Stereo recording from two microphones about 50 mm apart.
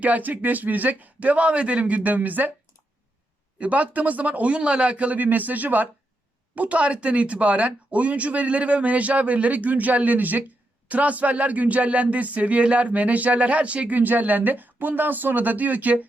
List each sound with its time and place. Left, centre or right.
0.0 s speech: right
3.6 s speech: right
14.0 s speech: right